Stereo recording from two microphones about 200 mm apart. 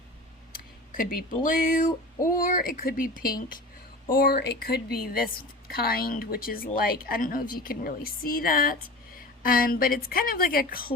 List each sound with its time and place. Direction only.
0.5 s a woman's voice: 45° left (ahead or behind)